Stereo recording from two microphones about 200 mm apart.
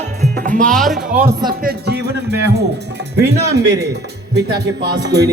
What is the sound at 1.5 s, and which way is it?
Music, 50° right (ahead or behind).